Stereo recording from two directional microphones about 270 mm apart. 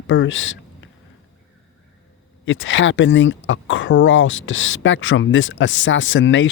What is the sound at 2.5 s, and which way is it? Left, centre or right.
Speech, left.